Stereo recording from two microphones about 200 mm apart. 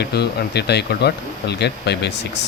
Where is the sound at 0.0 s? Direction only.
55° left (ahead or behind).